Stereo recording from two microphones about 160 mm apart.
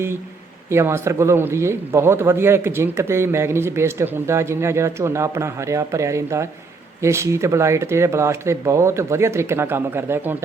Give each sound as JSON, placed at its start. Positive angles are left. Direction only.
{"t": 0.7, "sound": "speech", "side_deg": -15}